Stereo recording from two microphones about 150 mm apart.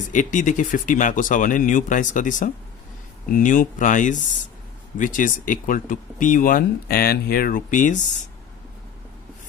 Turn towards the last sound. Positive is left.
turn(degrees=60)  # may be behind; listen again after turning